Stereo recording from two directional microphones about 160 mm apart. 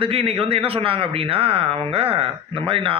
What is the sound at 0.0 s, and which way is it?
Speech, 35° right (ahead or behind).